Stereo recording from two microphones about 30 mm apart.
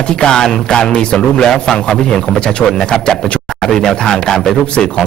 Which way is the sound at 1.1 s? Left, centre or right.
Centre.